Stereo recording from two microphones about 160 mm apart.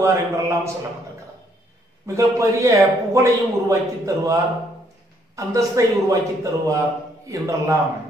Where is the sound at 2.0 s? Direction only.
20° right (ahead or behind).